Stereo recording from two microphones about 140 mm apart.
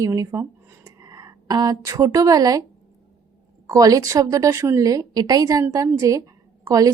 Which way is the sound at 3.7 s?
25° right (ahead or behind).